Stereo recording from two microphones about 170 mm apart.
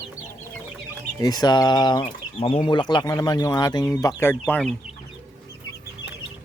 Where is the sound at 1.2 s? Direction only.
25° left (ahead or behind).